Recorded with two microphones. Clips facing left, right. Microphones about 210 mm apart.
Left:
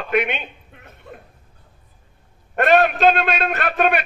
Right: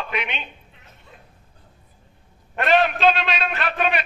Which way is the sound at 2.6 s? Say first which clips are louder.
Left 3 dB; 50° left (ahead or behind).